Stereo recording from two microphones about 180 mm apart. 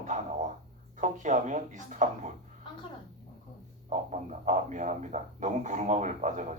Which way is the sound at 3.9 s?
40° right (ahead or behind).